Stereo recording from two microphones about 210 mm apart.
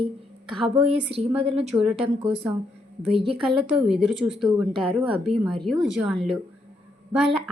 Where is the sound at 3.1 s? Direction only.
25° right (ahead or behind).